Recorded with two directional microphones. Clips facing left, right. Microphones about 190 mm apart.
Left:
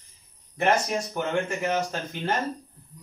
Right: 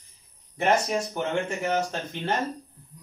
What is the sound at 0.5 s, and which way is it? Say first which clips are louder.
A man's voice: even; centre (ahead or behind).